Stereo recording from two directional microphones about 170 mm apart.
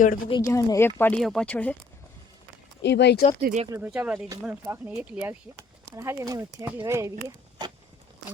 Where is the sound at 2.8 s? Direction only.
85° left.